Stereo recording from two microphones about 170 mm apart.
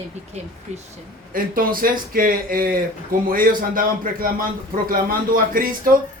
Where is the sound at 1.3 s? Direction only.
55° right (ahead or behind).